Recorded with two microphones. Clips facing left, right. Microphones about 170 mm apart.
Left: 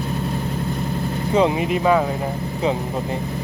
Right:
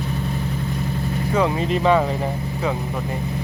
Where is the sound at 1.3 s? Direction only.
20° left (ahead or behind).